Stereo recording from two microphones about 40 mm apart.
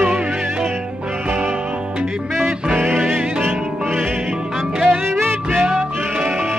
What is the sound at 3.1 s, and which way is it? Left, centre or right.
Music, right.